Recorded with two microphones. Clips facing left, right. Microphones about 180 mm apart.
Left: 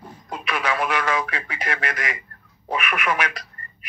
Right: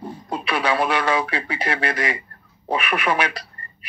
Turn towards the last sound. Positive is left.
turn(degrees=-30)  # may be behind; listen again after turning